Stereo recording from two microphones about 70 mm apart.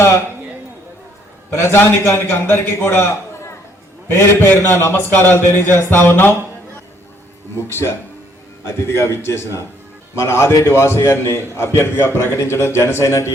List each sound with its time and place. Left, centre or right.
1.5 s a man's voice: left
7.7 s a man's voice: left